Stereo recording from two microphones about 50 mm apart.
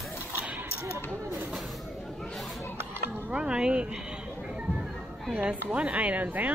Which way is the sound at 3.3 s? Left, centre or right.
Centre.